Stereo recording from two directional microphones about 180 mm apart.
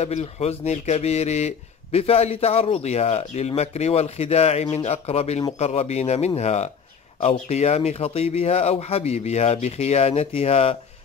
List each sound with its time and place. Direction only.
0.0 s speech: 35° left (ahead or behind)